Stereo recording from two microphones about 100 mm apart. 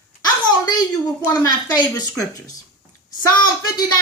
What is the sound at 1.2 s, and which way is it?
Speech, 40° left (ahead or behind).